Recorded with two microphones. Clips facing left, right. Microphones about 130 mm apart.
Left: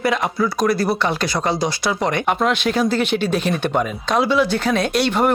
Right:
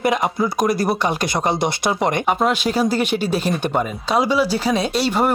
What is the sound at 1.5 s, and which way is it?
Speech, 60° right (ahead or behind).